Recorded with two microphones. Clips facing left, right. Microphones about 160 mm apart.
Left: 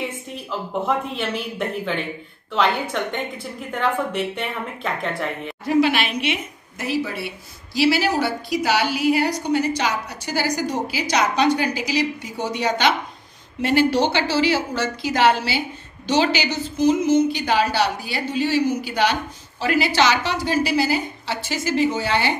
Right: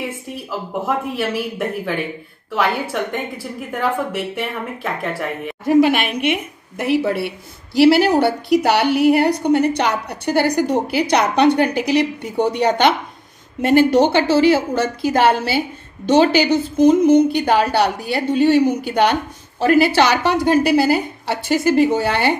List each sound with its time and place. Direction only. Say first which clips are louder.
0.3 s a woman's voice: right 2 dB; 10° right (ahead or behind)
5.7 s a woman's voice: right 5 dB; 50° right (ahead or behind)